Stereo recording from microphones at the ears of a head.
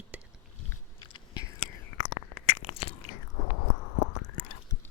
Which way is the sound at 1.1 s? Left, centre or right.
Left.